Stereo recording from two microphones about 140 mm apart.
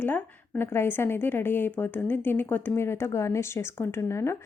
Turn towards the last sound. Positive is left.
turn(degrees=20)  # may be behind; listen again after turning